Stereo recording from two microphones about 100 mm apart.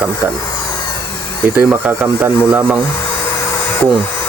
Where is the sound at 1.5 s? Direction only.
20° right (ahead or behind).